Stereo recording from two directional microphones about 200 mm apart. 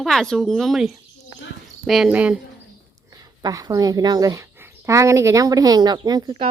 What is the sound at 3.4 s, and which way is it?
A woman's voice, 20° right (ahead or behind).